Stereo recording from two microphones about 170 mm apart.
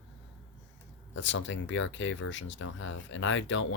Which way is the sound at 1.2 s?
90° left.